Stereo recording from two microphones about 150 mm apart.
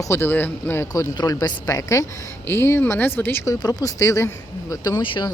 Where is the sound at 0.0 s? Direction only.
15° left (ahead or behind).